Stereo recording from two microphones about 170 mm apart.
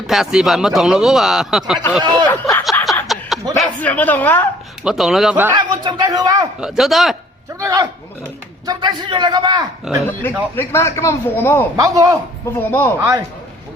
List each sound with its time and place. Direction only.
0.1 s speech: 5° right (ahead or behind)
2.0 s a man's voice: 25° right (ahead or behind)
2.3 s speech: 10° left (ahead or behind)
3.1 s chuckle: centre (ahead or behind)
3.5 s a man's voice: 5° left (ahead or behind)
4.8 s speech: 5° right (ahead or behind)
5.5 s a man's voice: 25° right (ahead or behind)
6.6 s speech: centre (ahead or behind)
7.6 s a man's voice: 20° right (ahead or behind)
9.9 s speech: centre (ahead or behind)
10.5 s a man's voice: 15° left (ahead or behind)
11.8 s a man's voice: 20° right (ahead or behind)
12.5 s a man's voice: 10° left (ahead or behind)
13.0 s a man's voice: 20° right (ahead or behind)